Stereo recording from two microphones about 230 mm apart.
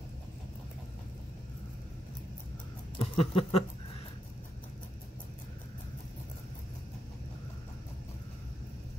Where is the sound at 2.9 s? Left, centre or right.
Left.